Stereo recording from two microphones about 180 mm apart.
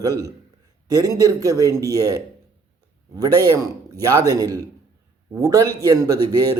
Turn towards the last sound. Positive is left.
turn(degrees=-20)  # may be behind; listen again after turning